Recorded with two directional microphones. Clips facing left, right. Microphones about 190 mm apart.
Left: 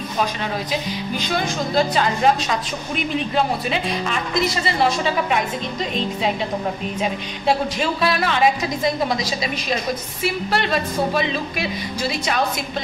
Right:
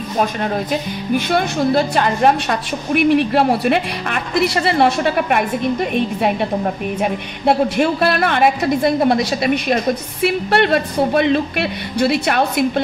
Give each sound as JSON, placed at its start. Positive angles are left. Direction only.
{"t": 0.2, "sound": "a woman's voice", "side_deg": -50}